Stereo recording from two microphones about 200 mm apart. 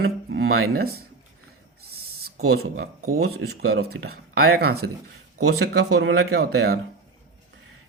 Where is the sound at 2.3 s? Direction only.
90° right.